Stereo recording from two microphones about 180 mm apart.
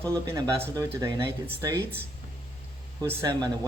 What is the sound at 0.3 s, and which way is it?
Speech, 20° right (ahead or behind).